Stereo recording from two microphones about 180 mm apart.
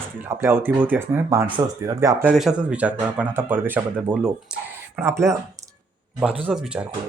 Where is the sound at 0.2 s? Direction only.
10° right (ahead or behind).